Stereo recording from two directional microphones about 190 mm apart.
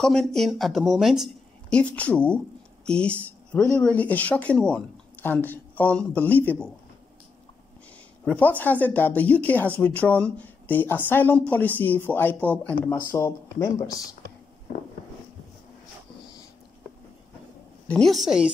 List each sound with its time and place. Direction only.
0.0 s speech: centre (ahead or behind)
8.3 s speech: 10° left (ahead or behind)
17.8 s a woman's voice: 5° left (ahead or behind)